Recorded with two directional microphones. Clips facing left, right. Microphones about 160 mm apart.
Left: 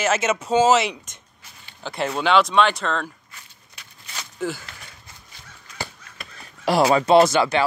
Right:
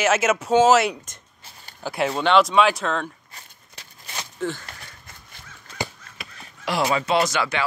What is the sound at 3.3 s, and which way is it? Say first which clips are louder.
Walk: right 1 dB; 30° right (ahead or behind).